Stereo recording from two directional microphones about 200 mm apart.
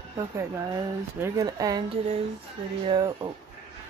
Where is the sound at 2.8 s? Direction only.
20° right (ahead or behind).